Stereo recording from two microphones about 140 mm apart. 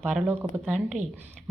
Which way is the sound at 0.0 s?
10° right (ahead or behind).